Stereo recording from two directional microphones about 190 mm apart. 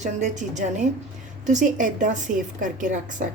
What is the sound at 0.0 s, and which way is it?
Speech, 40° right (ahead or behind).